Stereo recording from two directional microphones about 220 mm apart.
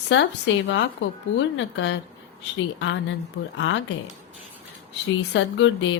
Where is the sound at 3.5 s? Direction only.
55° left (ahead or behind).